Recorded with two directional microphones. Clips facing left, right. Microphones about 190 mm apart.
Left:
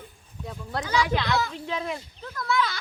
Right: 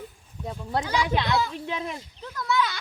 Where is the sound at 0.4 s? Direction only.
25° right (ahead or behind).